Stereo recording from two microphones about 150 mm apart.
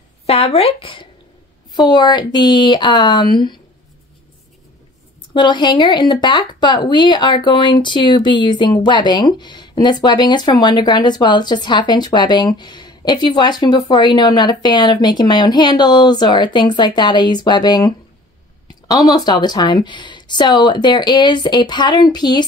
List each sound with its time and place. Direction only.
0.3 s speech: 40° left (ahead or behind)
5.3 s speech: 30° left (ahead or behind)